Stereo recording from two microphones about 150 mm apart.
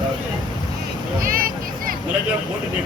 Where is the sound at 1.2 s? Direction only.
70° right (ahead or behind).